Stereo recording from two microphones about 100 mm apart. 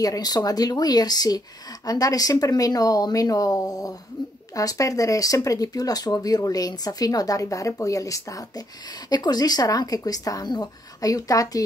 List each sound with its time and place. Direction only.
0.0 s speech: 40° left (ahead or behind)